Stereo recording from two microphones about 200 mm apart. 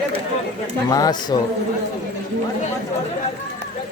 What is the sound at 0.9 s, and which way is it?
Speech, 20° left (ahead or behind).